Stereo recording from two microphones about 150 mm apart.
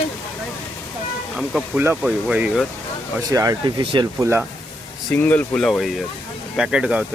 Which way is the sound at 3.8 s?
35° right (ahead or behind).